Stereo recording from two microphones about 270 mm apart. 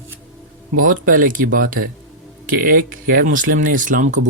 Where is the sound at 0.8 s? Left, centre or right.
Right.